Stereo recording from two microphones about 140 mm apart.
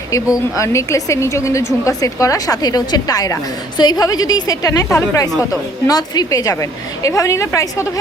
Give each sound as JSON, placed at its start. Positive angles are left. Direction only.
{"t": 0.5, "sound": "a woman's voice", "side_deg": 20}